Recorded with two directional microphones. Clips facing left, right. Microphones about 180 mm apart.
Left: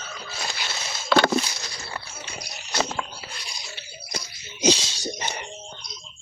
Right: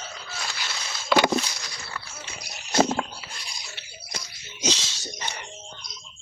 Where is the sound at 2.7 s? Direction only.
40° right (ahead or behind).